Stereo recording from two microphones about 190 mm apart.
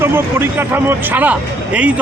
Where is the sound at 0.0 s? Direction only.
10° right (ahead or behind).